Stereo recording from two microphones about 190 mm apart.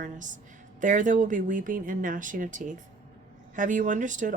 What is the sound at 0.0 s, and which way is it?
Speech, 40° right (ahead or behind).